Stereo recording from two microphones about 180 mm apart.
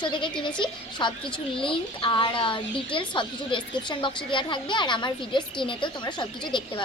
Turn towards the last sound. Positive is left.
turn(degrees=25)  # may be behind; listen again after turning